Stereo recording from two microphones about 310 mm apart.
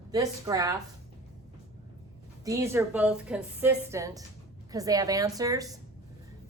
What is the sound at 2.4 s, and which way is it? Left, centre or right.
A woman's voice, centre.